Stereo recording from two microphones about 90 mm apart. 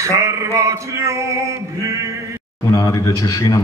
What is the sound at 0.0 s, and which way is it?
Male singing, 35° right (ahead or behind).